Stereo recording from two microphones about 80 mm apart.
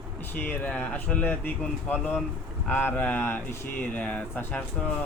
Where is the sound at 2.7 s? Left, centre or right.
Left.